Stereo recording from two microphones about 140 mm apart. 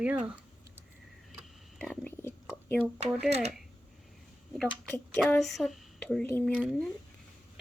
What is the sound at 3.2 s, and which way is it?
Speech, 50° right (ahead or behind).